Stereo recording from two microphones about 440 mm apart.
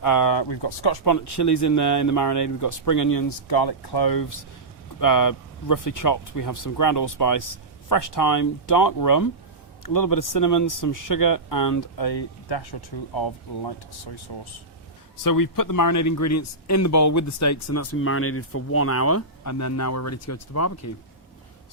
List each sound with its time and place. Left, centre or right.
0.0 s speech: left
1.0 s speech: left
3.5 s speech: left
15.2 s speech: left